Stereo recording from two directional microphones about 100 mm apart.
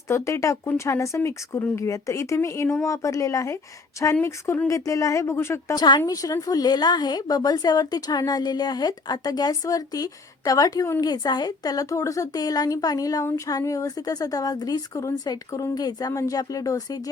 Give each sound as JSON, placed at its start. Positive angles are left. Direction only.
{"t": 0.1, "sound": "a woman's voice", "side_deg": 30}
{"t": 5.7, "sound": "a woman's voice", "side_deg": 45}
{"t": 6.1, "sound": "speech", "side_deg": 35}
{"t": 11.0, "sound": "speech", "side_deg": 40}